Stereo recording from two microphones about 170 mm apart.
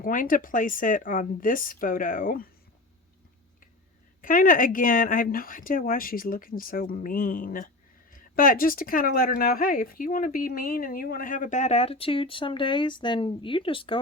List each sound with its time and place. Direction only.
0.0 s speech: 55° left (ahead or behind)
4.2 s speech: 55° left (ahead or behind); by 14.0 s 30° left (ahead or behind)